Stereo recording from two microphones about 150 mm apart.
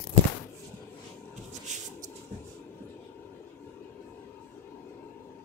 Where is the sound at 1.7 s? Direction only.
55° right (ahead or behind).